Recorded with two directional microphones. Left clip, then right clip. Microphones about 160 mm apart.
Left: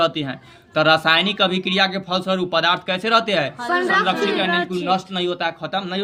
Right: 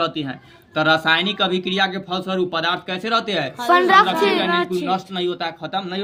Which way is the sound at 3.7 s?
70° right (ahead or behind).